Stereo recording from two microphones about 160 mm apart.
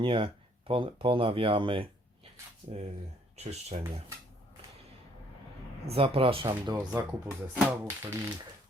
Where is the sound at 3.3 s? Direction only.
40° right (ahead or behind).